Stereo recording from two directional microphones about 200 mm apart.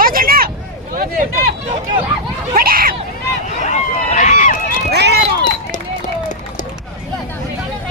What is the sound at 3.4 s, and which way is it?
Vehicle, 35° left (ahead or behind).